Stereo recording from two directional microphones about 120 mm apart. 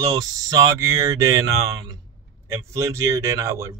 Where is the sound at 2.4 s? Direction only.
25° right (ahead or behind).